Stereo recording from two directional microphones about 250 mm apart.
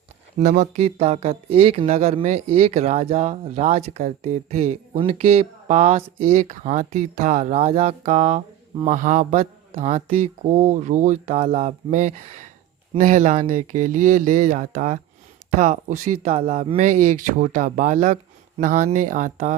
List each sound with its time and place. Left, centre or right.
0.3 s speech: right